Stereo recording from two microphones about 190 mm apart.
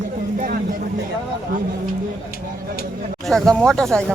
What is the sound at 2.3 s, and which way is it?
Speech, 50° left (ahead or behind).